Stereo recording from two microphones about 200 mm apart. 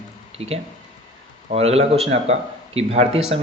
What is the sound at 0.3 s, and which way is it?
Speech, 30° right (ahead or behind).